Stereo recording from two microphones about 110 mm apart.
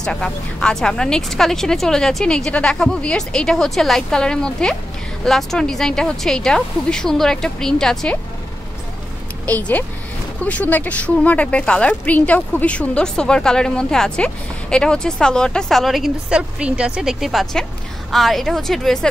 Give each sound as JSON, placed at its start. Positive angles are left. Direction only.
{"t": 0.0, "sound": "speech", "side_deg": 5}
{"t": 9.5, "sound": "speech", "side_deg": 15}